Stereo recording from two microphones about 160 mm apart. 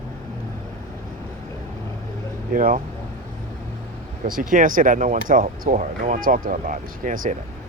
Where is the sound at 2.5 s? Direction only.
60° right (ahead or behind).